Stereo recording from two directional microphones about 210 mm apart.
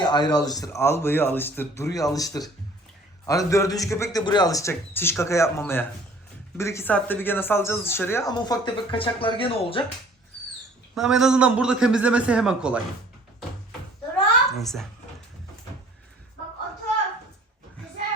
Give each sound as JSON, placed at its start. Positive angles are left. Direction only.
{"t": 0.0, "sound": "speech", "side_deg": 20}
{"t": 10.9, "sound": "a man's voice", "side_deg": -5}
{"t": 14.6, "sound": "a man's voice", "side_deg": 0}